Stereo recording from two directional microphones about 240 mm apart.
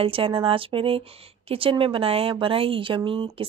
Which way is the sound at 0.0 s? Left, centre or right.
Right.